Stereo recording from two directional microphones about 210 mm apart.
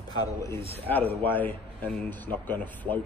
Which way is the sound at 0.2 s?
15° left (ahead or behind).